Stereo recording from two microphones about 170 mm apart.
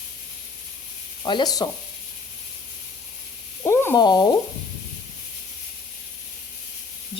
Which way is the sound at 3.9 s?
25° left (ahead or behind).